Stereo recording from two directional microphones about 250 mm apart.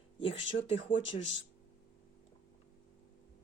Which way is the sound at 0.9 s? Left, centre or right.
Left.